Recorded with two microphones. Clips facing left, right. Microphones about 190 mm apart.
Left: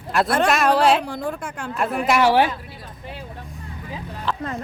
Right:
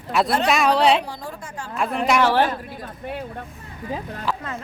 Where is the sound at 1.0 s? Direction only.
55° left (ahead or behind).